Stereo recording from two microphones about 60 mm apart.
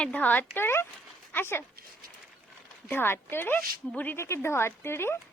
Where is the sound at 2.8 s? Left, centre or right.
Left.